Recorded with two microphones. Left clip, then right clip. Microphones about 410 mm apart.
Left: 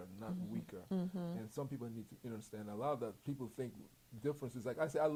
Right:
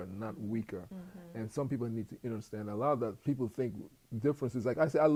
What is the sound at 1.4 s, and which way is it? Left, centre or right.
A man's voice, right.